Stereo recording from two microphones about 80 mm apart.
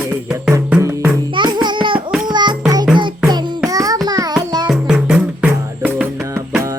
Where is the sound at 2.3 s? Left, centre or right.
Right.